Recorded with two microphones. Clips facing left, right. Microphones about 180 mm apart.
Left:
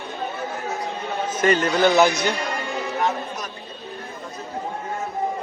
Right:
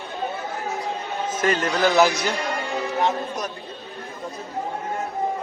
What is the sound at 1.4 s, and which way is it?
Speech, centre (ahead or behind).